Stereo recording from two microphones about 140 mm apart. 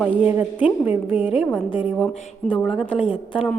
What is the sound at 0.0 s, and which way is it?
A woman's voice, 10° right (ahead or behind).